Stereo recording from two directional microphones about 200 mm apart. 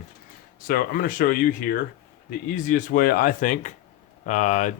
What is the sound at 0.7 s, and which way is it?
Speech, 45° left (ahead or behind).